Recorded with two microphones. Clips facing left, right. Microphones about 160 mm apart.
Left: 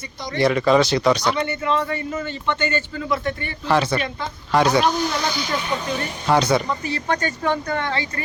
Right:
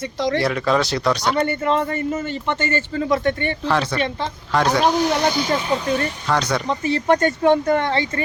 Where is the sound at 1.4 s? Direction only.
45° right (ahead or behind).